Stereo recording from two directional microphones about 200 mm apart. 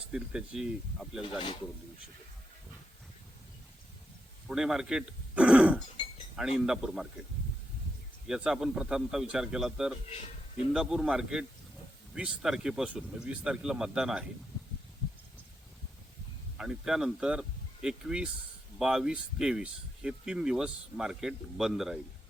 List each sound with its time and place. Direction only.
0.1 s speech: 5° right (ahead or behind)
1.2 s speech: 25° left (ahead or behind)
4.4 s speech: 5° right (ahead or behind)
8.3 s speech: 5° right (ahead or behind)
16.6 s speech: 5° right (ahead or behind)